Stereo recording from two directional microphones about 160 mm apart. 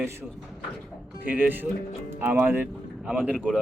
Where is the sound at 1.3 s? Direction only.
10° right (ahead or behind).